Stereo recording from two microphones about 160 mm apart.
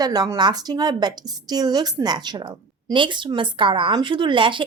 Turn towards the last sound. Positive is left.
turn(degrees=-30)  # may be behind; listen again after turning